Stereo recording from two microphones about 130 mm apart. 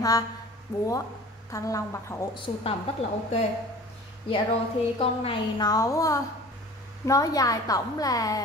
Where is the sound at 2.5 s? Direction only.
55° left (ahead or behind).